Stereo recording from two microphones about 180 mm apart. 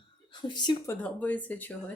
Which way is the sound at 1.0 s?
10° left (ahead or behind).